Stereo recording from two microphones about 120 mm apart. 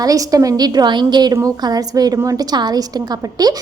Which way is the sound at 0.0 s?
30° right (ahead or behind).